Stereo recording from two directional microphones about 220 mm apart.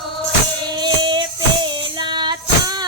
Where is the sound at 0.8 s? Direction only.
20° right (ahead or behind).